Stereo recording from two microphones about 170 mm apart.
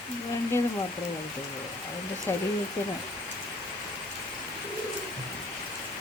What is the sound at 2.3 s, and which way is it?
Speech, 15° left (ahead or behind).